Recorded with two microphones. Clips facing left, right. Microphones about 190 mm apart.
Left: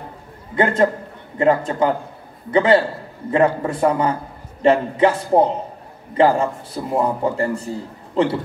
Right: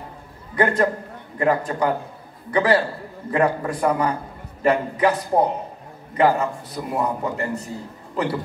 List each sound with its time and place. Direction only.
1.4 s a man's voice: 25° left (ahead or behind)